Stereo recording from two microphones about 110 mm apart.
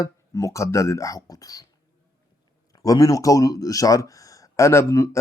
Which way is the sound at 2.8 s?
30° left (ahead or behind).